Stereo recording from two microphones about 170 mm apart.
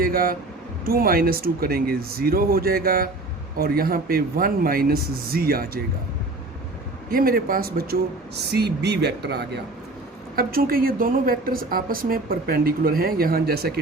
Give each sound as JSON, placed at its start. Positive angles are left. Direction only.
{"t": 0.0, "sound": "a woman's voice", "side_deg": -60}
{"t": 7.1, "sound": "a woman's voice", "side_deg": -60}
{"t": 8.4, "sound": "speech", "side_deg": -75}
{"t": 10.3, "sound": "a woman's voice", "side_deg": -60}